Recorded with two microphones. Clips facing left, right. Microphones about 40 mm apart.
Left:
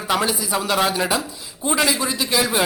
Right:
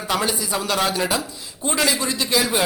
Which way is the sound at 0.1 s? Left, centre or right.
Centre.